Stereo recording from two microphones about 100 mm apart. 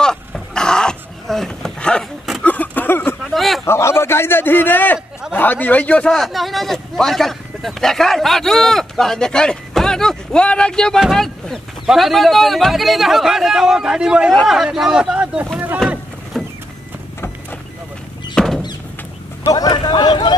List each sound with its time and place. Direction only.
0.0 s dog: 5° left (ahead or behind)
2.4 s a sound: 15° left (ahead or behind)
3.3 s a sound: centre (ahead or behind)
3.6 s a man's voice: 25° left (ahead or behind)
6.1 s speech: centre (ahead or behind)
15.8 s boat: 5° left (ahead or behind)
16.3 s vehicle: 5° left (ahead or behind)
18.3 s a sound: 5° left (ahead or behind)
19.4 s speech: 40° left (ahead or behind)